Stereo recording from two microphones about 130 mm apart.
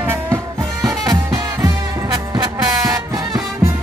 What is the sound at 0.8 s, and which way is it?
Music, 25° right (ahead or behind).